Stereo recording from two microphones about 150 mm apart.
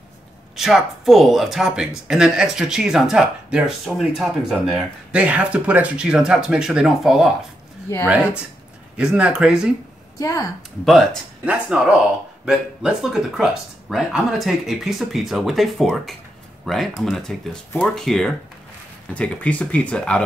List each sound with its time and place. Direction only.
0.6 s speech: centre (ahead or behind)
10.1 s speech: 25° left (ahead or behind)
10.9 s speech: 5° right (ahead or behind)